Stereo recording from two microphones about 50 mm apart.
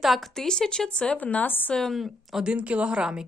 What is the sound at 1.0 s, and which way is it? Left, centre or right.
Speech, left.